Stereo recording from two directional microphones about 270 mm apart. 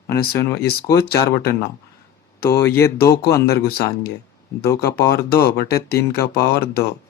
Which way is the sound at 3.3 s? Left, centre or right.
Left.